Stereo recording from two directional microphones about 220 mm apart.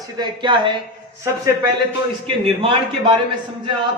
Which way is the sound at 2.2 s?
25° right (ahead or behind).